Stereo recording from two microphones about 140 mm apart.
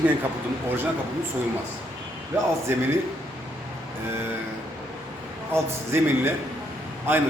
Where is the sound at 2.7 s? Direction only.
15° right (ahead or behind).